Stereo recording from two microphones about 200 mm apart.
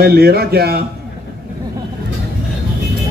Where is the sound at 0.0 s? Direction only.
50° right (ahead or behind).